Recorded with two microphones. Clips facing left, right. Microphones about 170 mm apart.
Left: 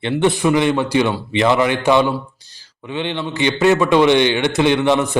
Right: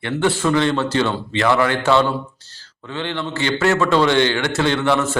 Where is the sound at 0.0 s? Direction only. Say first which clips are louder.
Left 3 dB; 20° left (ahead or behind).